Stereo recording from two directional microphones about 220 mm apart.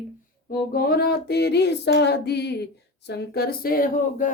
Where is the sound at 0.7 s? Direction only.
45° left (ahead or behind).